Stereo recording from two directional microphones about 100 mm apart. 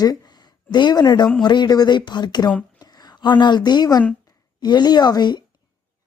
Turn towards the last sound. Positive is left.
turn(degrees=45)  # may be behind; listen again after turning